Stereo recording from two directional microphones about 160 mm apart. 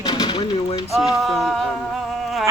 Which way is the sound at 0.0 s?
25° left (ahead or behind).